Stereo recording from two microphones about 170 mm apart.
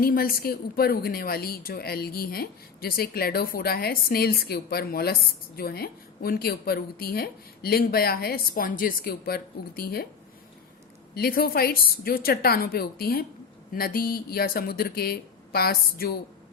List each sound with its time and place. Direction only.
0.0 s a woman's voice: 60° left (ahead or behind)
11.1 s a woman's voice: 60° left (ahead or behind)